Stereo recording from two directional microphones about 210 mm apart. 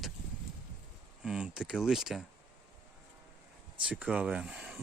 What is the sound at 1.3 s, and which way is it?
Speech, 5° right (ahead or behind).